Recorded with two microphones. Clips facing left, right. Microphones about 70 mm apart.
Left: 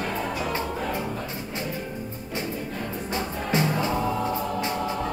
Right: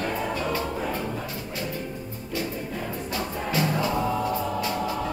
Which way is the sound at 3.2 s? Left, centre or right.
Left.